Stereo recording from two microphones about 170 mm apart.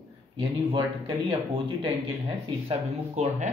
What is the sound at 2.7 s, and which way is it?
Speech, 45° right (ahead or behind).